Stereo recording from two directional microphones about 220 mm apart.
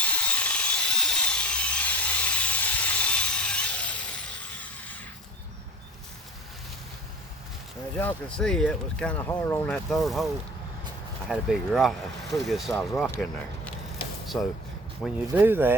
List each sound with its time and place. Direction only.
0.0 s sawing: 5° left (ahead or behind)
7.9 s speech: 5° left (ahead or behind)
14.3 s speech: 5° left (ahead or behind)
15.3 s speech: 10° right (ahead or behind)